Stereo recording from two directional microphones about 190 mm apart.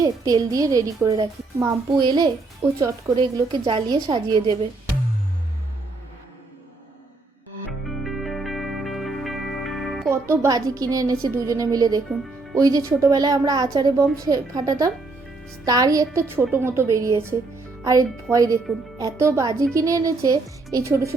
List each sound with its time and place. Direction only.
0.0 s a child's voice: 20° right (ahead or behind)
7.7 s music: centre (ahead or behind)
10.1 s a child's voice: 15° right (ahead or behind)